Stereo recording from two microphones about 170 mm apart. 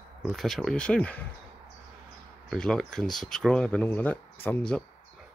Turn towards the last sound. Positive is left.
turn(degrees=5)  # may be behind; listen again after turning